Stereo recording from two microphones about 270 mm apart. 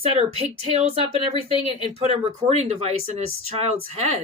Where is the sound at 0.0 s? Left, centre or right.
Right.